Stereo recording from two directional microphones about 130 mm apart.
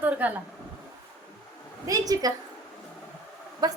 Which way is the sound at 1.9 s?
30° right (ahead or behind).